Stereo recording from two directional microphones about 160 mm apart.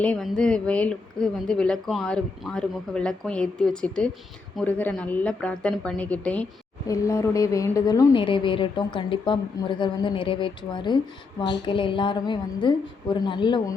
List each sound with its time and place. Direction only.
0.0 s a woman's voice: 5° left (ahead or behind)
6.8 s a woman's voice: 20° left (ahead or behind)